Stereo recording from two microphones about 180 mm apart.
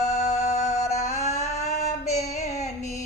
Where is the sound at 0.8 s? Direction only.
40° left (ahead or behind).